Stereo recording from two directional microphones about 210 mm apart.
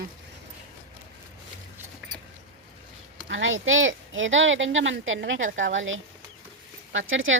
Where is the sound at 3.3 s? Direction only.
65° right (ahead or behind).